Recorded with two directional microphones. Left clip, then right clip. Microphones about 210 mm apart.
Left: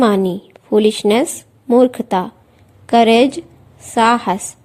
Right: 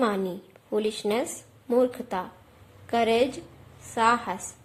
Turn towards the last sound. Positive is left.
turn(degrees=40)  # may be behind; listen again after turning